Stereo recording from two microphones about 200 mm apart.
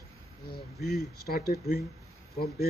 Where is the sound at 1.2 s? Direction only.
50° left (ahead or behind).